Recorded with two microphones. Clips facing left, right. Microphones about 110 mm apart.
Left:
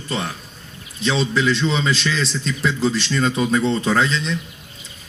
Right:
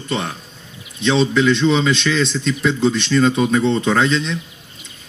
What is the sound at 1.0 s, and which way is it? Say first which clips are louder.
Speech: right 4 dB; 30° right (ahead or behind).